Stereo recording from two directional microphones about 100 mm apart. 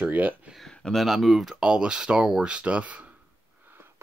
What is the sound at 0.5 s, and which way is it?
Speech, 5° left (ahead or behind).